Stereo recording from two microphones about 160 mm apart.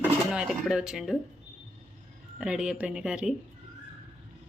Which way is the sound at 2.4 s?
5° right (ahead or behind).